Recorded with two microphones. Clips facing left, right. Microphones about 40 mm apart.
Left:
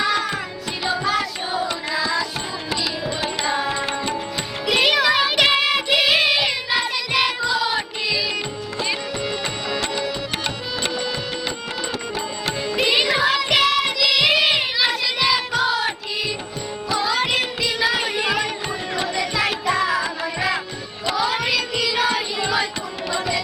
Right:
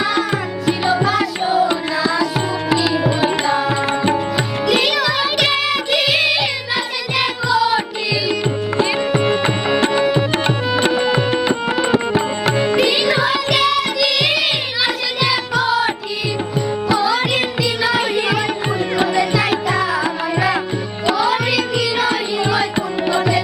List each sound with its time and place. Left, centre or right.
0.0 s music: centre
2.0 s tabla: centre
3.4 s tabla: centre
3.7 s tabla: right
4.6 s music: centre
8.8 s tabla: right
12.9 s music: centre
17.0 s music: centre
23.1 s music: right